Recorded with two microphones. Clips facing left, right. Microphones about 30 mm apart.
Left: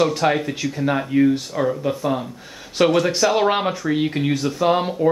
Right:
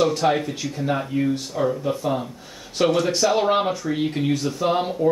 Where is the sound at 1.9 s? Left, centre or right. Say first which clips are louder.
Left 2 dB; centre.